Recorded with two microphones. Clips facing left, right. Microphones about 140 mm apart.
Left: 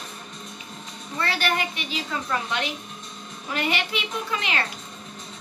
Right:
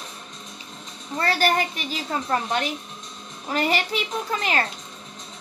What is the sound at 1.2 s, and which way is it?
A woman's voice, 40° right (ahead or behind).